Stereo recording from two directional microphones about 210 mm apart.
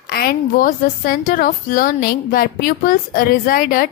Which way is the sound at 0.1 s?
45° left (ahead or behind).